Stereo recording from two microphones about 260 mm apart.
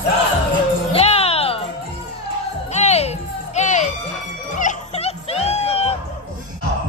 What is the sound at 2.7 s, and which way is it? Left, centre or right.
Music, left.